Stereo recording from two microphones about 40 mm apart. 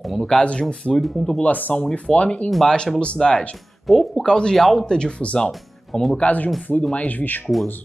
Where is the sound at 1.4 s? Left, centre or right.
Left.